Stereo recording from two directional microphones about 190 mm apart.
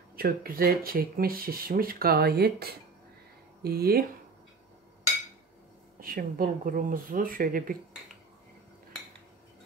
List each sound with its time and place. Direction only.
0.1 s speech: 50° right (ahead or behind)
5.9 s speech: 50° right (ahead or behind)